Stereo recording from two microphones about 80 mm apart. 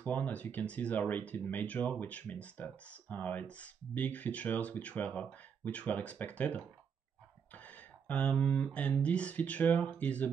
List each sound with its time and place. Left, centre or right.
0.0 s speech: left
7.5 s a sound: centre
8.7 s speech: centre